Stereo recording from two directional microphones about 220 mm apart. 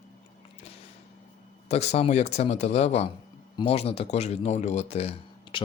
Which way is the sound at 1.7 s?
30° left (ahead or behind).